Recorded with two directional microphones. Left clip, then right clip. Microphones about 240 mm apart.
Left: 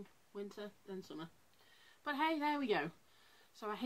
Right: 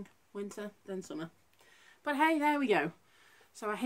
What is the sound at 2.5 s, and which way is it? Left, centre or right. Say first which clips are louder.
Speech: right 7 dB; left.